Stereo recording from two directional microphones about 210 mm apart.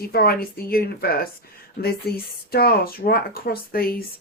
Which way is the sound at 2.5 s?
45° left (ahead or behind).